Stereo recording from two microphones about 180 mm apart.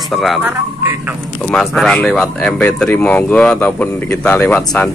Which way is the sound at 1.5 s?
Centre (ahead or behind).